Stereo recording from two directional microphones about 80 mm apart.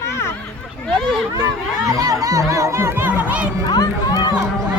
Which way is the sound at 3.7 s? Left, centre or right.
Left.